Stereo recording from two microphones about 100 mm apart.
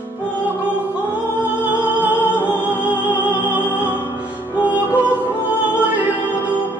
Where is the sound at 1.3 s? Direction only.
20° left (ahead or behind).